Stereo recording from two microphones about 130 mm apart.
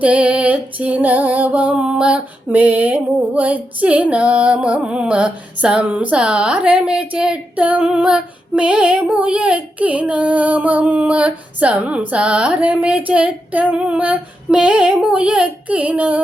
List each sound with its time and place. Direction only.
0.0 s female singing: 10° right (ahead or behind)